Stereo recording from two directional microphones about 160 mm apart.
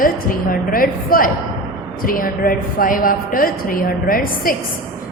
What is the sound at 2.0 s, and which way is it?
A woman's voice, 60° left (ahead or behind).